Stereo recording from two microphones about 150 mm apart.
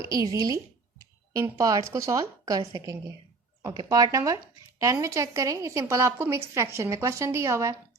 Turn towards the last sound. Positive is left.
turn(degrees=-20)  # may be behind; listen again after turning